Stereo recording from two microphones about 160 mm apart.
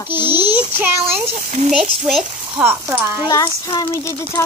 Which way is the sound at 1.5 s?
50° right (ahead or behind).